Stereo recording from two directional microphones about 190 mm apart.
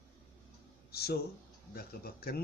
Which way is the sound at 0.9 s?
55° left (ahead or behind).